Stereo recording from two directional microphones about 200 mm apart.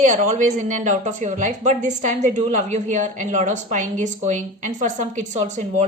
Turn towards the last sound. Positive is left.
turn(degrees=-35)  # may be behind; listen again after turning